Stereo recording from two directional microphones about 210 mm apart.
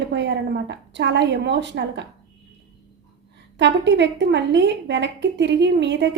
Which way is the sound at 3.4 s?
60° right (ahead or behind).